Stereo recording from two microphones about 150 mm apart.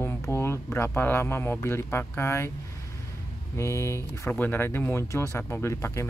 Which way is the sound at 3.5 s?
20° left (ahead or behind).